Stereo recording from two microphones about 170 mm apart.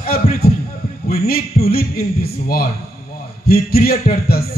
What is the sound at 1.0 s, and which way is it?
A man's voice, 60° left (ahead or behind).